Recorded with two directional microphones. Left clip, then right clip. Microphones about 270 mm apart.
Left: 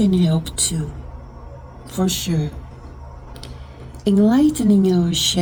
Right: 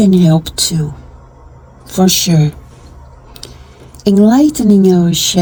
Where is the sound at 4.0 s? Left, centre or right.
Right.